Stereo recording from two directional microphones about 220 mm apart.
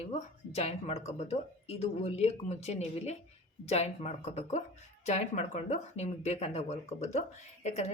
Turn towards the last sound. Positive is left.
turn(degrees=30)  # may be behind; listen again after turning